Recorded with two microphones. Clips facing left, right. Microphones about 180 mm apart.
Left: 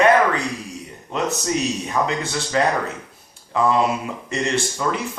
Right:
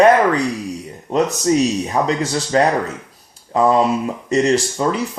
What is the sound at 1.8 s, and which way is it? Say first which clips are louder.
Speech: right 4 dB; 35° right (ahead or behind).